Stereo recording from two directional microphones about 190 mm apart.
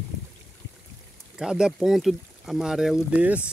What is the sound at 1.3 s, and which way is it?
Speech, 5° right (ahead or behind).